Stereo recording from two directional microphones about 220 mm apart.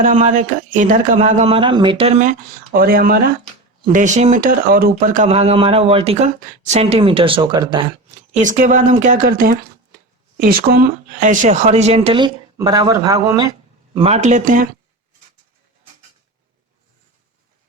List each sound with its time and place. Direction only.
0.0 s speech: 35° right (ahead or behind)
2.7 s speech: 40° right (ahead or behind); by 7.9 s 20° right (ahead or behind)
8.3 s speech: 35° right (ahead or behind); by 13.5 s 15° right (ahead or behind)
13.9 s speech: 25° right (ahead or behind)